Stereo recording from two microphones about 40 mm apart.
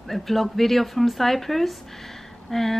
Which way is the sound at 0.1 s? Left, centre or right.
Centre.